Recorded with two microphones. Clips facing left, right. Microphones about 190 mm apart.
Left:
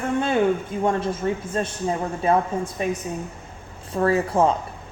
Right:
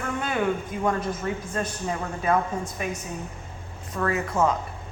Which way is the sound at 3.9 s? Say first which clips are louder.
Left 6 dB; 30° left (ahead or behind).